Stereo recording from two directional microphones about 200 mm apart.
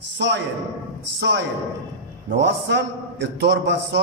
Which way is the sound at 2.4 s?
60° right (ahead or behind).